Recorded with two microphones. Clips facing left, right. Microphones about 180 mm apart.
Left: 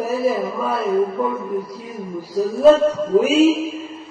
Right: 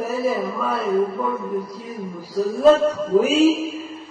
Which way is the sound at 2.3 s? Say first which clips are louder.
Left 2 dB; centre (ahead or behind).